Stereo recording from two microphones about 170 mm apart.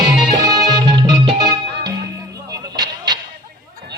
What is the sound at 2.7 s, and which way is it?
Vehicle, 25° right (ahead or behind).